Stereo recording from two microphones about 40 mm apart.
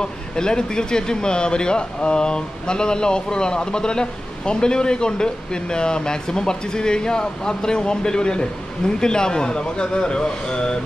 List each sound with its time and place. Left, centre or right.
0.0 s speech: centre